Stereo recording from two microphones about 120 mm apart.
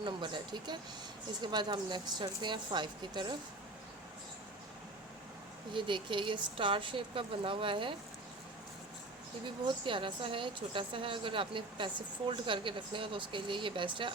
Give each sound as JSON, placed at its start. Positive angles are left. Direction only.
{"t": 0.0, "sound": "speech", "side_deg": -40}
{"t": 5.7, "sound": "a woman's voice", "side_deg": -45}
{"t": 9.6, "sound": "a woman's voice", "side_deg": -45}